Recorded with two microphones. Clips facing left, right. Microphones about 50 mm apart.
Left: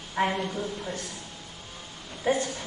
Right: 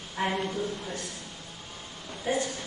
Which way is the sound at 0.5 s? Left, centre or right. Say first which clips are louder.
Even; centre.